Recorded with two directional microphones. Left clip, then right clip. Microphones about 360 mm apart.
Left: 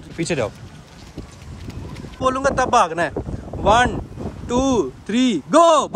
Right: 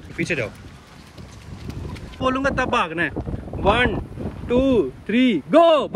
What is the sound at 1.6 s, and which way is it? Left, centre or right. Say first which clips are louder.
Vehicle: even; centre.